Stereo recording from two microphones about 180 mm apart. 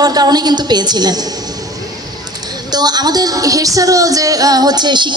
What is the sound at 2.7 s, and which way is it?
Speech, 20° right (ahead or behind).